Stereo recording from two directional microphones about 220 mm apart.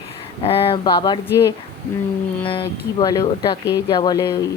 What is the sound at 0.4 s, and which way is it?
A woman's voice, 25° left (ahead or behind).